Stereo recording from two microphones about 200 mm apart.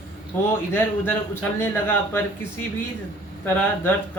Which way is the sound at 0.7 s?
10° left (ahead or behind).